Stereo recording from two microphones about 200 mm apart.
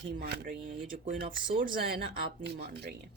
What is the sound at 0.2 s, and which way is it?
Speech, 45° right (ahead or behind).